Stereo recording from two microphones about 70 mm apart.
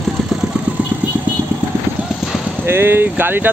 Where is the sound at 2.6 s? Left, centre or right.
Right.